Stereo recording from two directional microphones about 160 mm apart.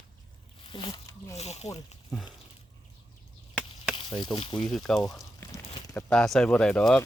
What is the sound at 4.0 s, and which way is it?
Speech, 30° left (ahead or behind).